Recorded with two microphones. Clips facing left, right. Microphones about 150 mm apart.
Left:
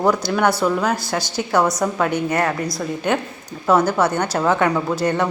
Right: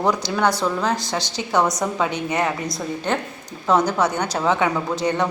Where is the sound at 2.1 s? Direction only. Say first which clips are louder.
Left 3 dB; 15° right (ahead or behind).